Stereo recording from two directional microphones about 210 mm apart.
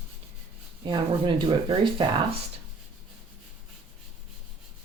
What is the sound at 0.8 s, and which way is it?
Speech, 20° right (ahead or behind).